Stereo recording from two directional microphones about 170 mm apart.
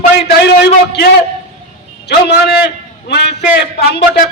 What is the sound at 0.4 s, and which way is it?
Speech, 80° left.